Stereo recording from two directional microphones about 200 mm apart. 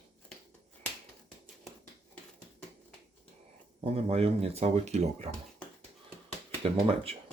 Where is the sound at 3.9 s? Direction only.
30° right (ahead or behind).